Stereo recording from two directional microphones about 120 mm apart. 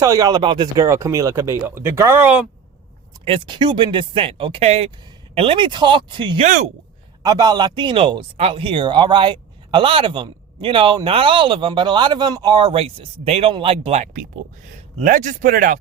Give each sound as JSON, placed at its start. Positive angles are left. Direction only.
{"t": 0.0, "sound": "speech", "side_deg": -30}
{"t": 0.9, "sound": "speech", "side_deg": -25}
{"t": 3.2, "sound": "speech", "side_deg": -45}
{"t": 6.4, "sound": "speech", "side_deg": -90}
{"t": 7.2, "sound": "speech", "side_deg": -35}
{"t": 14.9, "sound": "speech", "side_deg": -90}